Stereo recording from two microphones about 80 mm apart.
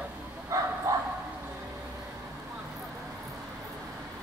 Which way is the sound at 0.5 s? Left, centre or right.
Right.